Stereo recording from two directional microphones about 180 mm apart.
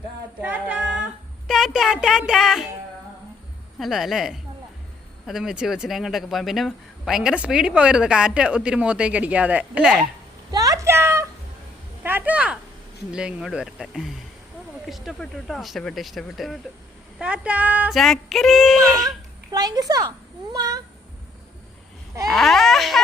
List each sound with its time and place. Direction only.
0.4 s a sound: 10° right (ahead or behind)
3.8 s speech: centre (ahead or behind)
10.5 s a sound: 20° right (ahead or behind)
12.0 s speech: 10° right (ahead or behind)
19.5 s a child's voice: 20° right (ahead or behind)
22.3 s speech: centre (ahead or behind)